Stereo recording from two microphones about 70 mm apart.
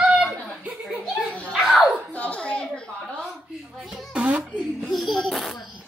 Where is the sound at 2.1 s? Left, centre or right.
Left.